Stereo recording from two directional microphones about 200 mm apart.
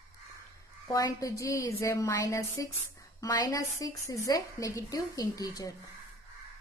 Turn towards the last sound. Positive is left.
turn(degrees=20)  # may be behind; listen again after turning